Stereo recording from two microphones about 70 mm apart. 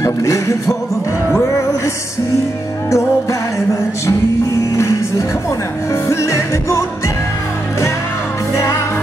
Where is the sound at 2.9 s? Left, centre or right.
Left.